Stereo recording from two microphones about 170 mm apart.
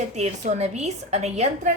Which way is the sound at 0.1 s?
40° right (ahead or behind).